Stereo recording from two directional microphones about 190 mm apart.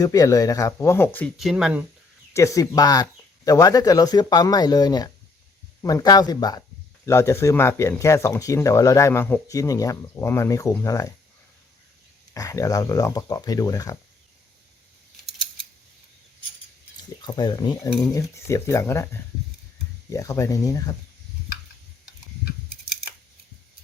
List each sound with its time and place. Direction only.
0.0 s speech: 15° left (ahead or behind); by 1.8 s 5° right (ahead or behind)
2.3 s speech: 15° left (ahead or behind)
12.3 s speech: 15° left (ahead or behind)
17.2 s speech: 25° left (ahead or behind)